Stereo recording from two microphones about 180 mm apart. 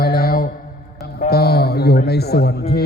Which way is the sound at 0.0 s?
55° left (ahead or behind).